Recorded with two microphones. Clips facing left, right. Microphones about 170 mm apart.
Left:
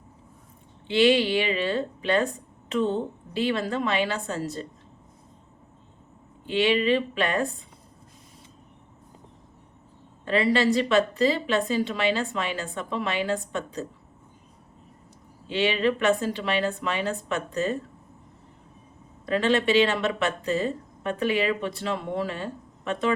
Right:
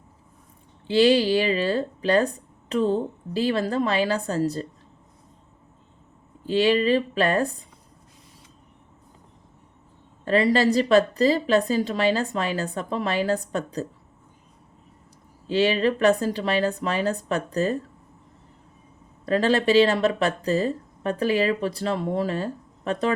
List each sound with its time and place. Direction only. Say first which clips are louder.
0.9 s speech: right 2 dB; 35° right (ahead or behind)
6.4 s speech: right 3 dB; 40° right (ahead or behind)
10.2 s speech: right 2 dB; 40° right (ahead or behind)
15.4 s speech: right 3 dB; 40° right (ahead or behind)
19.2 s speech: right 2 dB; 35° right (ahead or behind)